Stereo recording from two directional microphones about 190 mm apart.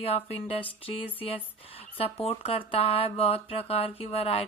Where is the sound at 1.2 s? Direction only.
30° left (ahead or behind).